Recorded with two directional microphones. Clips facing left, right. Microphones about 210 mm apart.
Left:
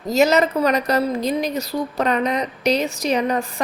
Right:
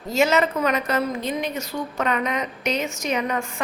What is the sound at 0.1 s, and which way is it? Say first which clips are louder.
A woman's voice: left 4 dB; 40° left (ahead or behind).